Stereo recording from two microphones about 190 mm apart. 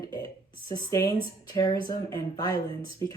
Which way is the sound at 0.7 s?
15° left (ahead or behind).